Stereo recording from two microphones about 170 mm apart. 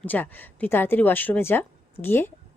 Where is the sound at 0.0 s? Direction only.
10° left (ahead or behind).